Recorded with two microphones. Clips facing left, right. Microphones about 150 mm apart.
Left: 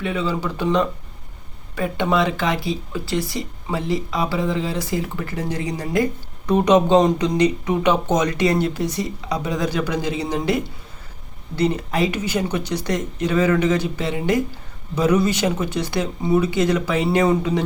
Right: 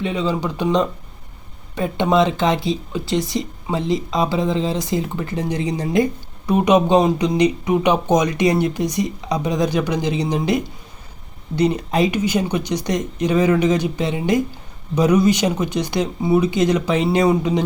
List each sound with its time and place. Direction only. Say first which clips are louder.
0.0 s speech: right 2 dB; 20° right (ahead or behind)
6.4 s speech: even; 10° right (ahead or behind)